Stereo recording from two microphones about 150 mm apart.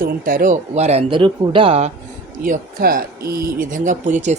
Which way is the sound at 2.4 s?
70° right (ahead or behind).